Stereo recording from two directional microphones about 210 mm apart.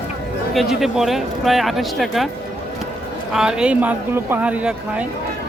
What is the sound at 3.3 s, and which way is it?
Speech, 5° right (ahead or behind).